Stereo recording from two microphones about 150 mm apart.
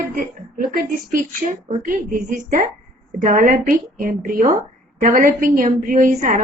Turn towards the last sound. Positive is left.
turn(degrees=-65)  # may be behind; listen again after turning